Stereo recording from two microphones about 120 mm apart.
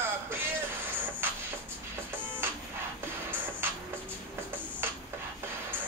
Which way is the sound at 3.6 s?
20° right (ahead or behind).